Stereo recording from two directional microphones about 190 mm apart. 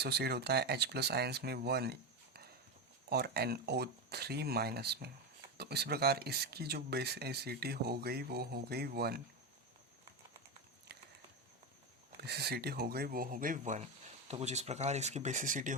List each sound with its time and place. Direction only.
0.0 s speech: 60° right (ahead or behind)
10.9 s a sound: 60° right (ahead or behind)
12.1 s speech: 60° right (ahead or behind); by 15.8 s 45° right (ahead or behind)